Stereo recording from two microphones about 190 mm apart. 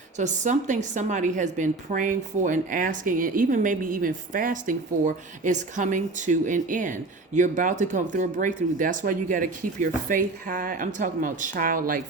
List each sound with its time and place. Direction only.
0.2 s a woman's voice: 40° right (ahead or behind)